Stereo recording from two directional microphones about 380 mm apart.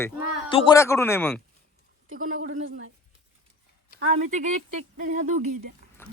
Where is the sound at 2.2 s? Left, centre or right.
Right.